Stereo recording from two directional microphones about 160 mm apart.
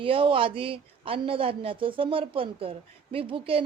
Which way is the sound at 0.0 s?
35° right (ahead or behind).